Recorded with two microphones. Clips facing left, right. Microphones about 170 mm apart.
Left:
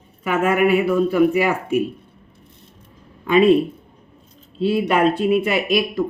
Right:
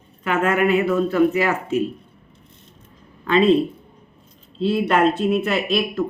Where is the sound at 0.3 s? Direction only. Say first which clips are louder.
Left 2 dB; 10° left (ahead or behind).